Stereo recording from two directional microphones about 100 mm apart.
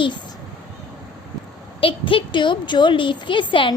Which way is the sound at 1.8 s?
65° left (ahead or behind).